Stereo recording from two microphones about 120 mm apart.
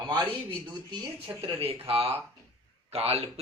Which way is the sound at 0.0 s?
35° right (ahead or behind).